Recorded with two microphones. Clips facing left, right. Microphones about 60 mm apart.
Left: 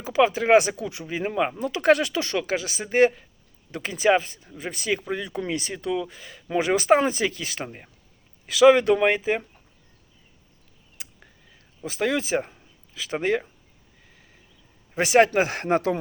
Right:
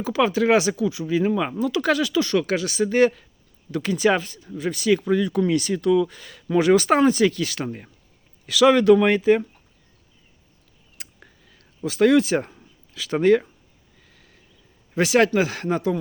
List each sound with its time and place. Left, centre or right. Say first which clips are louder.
0.0 s speech: right 1 dB; left
0.8 s speech: right 8 dB; left
1.0 s speech: right 2 dB; left
2.5 s speech: right 5 dB; centre
8.8 s speech: right 6 dB; left
9.0 s speech: right 5 dB; centre
11.9 s speech: right 7 dB; centre
14.9 s speech: even; left